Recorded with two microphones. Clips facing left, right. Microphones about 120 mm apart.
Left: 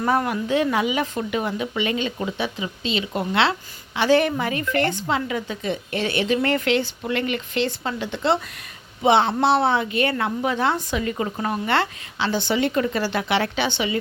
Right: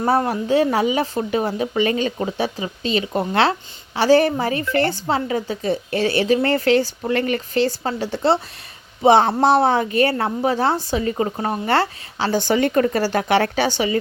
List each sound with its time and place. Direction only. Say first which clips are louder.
0.0 s a woman's voice: right 3 dB; 30° right (ahead or behind)